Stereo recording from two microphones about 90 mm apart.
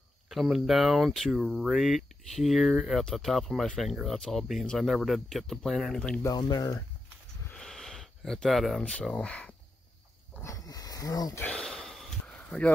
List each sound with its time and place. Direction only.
0.3 s speech: centre (ahead or behind)
6.3 s speech: 50° left (ahead or behind)
7.5 s a sound: 5° left (ahead or behind)
8.8 s speech: 10° left (ahead or behind)
10.4 s wild animals: 40° left (ahead or behind)
11.4 s snort: 5° left (ahead or behind)